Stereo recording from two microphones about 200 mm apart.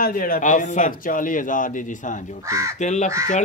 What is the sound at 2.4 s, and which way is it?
Speech, 15° right (ahead or behind).